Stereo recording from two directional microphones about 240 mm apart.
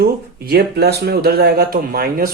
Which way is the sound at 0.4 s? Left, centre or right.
Right.